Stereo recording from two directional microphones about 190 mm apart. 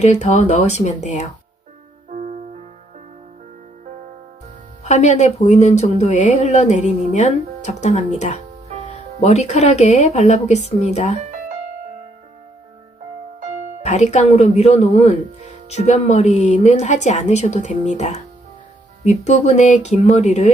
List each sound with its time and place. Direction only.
0.0 s speech: 35° left (ahead or behind)
4.8 s speech: 35° left (ahead or behind)
11.2 s music: 40° right (ahead or behind)
13.8 s speech: 35° left (ahead or behind)